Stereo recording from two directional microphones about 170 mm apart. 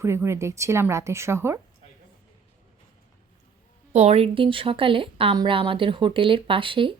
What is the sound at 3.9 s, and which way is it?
A woman's voice, 40° right (ahead or behind).